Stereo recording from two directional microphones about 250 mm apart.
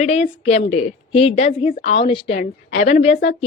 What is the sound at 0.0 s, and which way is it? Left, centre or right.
Speech, left.